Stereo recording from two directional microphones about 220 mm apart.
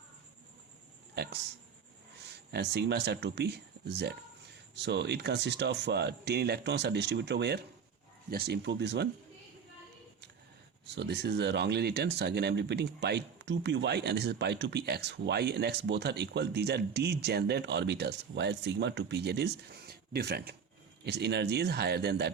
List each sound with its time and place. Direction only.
1.1 s a sound: 50° right (ahead or behind)
2.5 s speech: 50° right (ahead or behind)
10.9 s speech: 50° right (ahead or behind)